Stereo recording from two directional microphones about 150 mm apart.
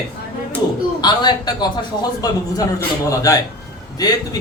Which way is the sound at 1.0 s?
25° left (ahead or behind).